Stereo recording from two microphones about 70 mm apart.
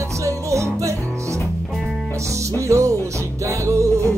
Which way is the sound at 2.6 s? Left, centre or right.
Right.